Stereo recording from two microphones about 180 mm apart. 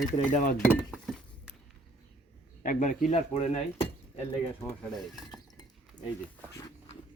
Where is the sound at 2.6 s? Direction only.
45° left (ahead or behind).